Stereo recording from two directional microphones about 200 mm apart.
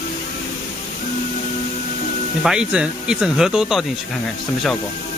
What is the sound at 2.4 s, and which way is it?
Speech, 5° right (ahead or behind).